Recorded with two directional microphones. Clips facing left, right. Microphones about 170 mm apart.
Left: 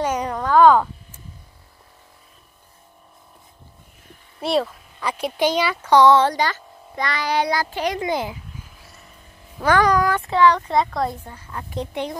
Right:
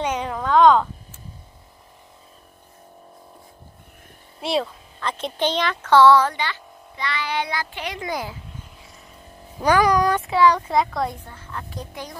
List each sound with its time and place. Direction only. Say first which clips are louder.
0.0 s a sound: left 2 dB; 5° left (ahead or behind)
4.4 s speech: left 3 dB; centre (ahead or behind); by 6.2 s 20° left (ahead or behind)
6.2 s a child's voice: left 5 dB; 40° left (ahead or behind)
8.0 s speech: left 5 dB; 25° left (ahead or behind)
9.6 s speech: even; 15° right (ahead or behind)
11.2 s speech: left 1 dB; 10° left (ahead or behind)
11.8 s speech: left 8 dB; 25° left (ahead or behind)